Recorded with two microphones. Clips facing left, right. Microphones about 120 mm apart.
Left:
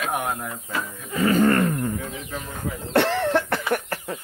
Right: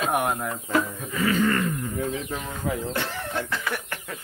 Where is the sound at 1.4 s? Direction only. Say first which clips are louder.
Left 4 dB; 50° left (ahead or behind).